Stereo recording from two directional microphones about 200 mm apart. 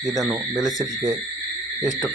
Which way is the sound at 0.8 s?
20° right (ahead or behind).